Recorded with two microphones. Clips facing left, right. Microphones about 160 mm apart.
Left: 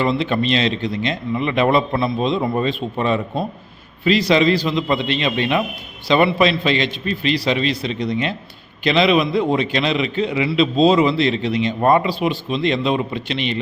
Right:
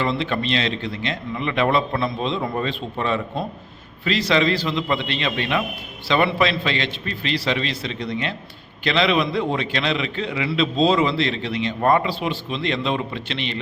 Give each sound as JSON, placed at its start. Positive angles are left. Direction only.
{"t": 0.0, "sound": "a man's voice", "side_deg": 20}